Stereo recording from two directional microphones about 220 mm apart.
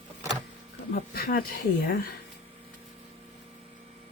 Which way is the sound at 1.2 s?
40° left (ahead or behind).